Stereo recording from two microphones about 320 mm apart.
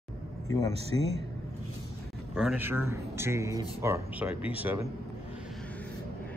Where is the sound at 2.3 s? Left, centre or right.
Centre.